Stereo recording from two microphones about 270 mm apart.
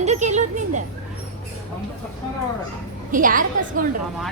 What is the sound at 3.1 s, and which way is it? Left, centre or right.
Speech, right.